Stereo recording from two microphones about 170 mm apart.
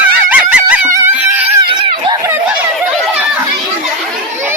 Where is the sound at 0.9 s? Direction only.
15° right (ahead or behind).